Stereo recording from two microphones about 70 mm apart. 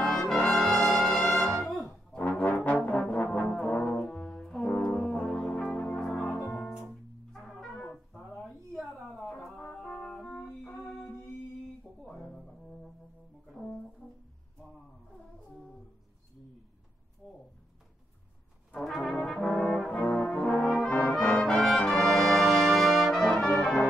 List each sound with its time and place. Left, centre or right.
0.0 s brass instrument: centre
2.1 s brass instrument: centre
4.9 s music: centre
8.1 s a sound: centre
9.2 s music: centre
9.6 s brass instrument: centre
10.5 s music: centre
12.0 s music: centre
13.5 s brass instrument: centre
18.9 s brass instrument: centre
19.1 s brass instrument: centre